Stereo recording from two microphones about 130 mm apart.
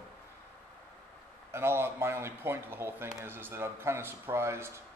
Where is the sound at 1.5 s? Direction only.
20° right (ahead or behind).